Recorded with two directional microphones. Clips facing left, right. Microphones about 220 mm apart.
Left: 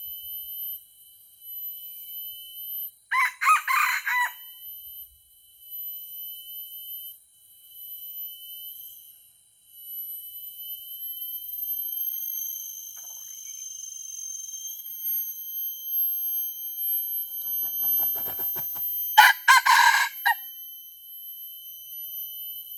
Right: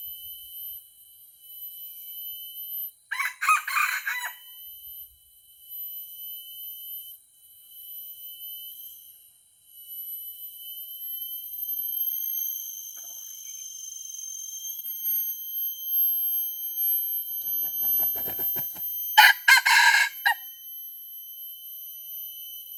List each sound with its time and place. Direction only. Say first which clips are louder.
3.1 s chicken: left 4 dB; 30° right (ahead or behind)
17.0 s fire alarm: right 2 dB; 10° right (ahead or behind)